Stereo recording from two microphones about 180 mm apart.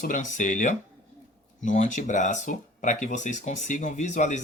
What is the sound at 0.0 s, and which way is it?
Speech, 45° left (ahead or behind).